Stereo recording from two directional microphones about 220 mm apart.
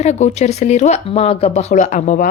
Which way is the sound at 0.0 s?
30° left (ahead or behind).